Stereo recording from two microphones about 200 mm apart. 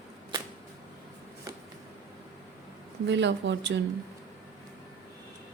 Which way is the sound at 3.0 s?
60° right (ahead or behind).